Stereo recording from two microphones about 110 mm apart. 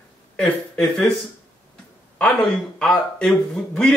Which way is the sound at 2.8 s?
5° left (ahead or behind).